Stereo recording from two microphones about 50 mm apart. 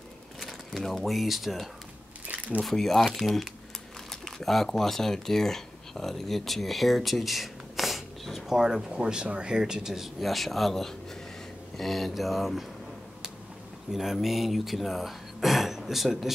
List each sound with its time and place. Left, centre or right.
0.4 s speech: centre
2.2 s camera: right
2.6 s speech: centre
3.1 s speech: centre
4.1 s speech: centre
8.9 s speech: centre
13.9 s speech: centre